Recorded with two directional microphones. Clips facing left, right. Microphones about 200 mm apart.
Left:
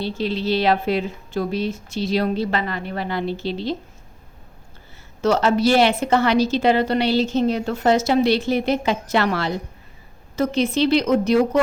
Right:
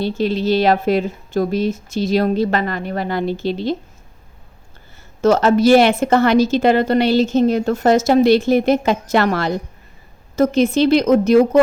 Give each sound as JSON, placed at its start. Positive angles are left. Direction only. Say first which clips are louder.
{"t": 0.0, "sound": "a woman's voice", "louder": "right 5 dB", "side_deg": -45}
{"t": 5.2, "sound": "a woman's voice", "louder": "right 5 dB", "side_deg": -45}